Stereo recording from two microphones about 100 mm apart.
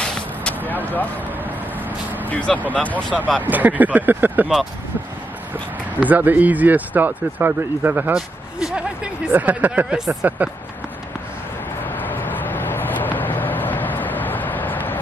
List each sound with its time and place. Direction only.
0.0 s vehicle: 10° left (ahead or behind)
2.2 s speech: 15° left (ahead or behind)
3.4 s speech: 15° right (ahead or behind)
6.0 s speech: 15° right (ahead or behind)
8.1 s speech: 10° right (ahead or behind)
12.1 s vehicle: 20° left (ahead or behind)